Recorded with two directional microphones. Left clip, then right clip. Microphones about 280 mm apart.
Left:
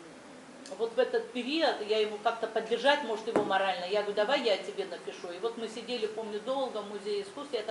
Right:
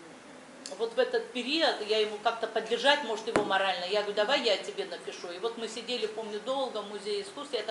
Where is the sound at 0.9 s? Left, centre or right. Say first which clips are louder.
Right 1 dB; centre.